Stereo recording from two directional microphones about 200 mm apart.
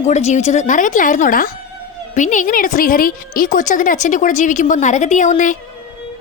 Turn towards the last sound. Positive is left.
turn(degrees=40)  # may be behind; listen again after turning